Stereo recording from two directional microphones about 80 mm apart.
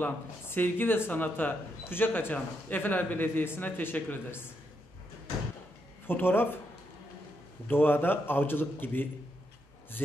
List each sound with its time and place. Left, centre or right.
0.0 s speech: left
6.0 s speech: left
7.6 s speech: left